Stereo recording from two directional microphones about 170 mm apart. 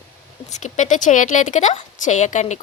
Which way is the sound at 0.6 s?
45° left (ahead or behind).